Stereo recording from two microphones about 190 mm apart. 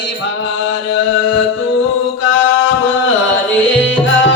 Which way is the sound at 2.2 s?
90° left.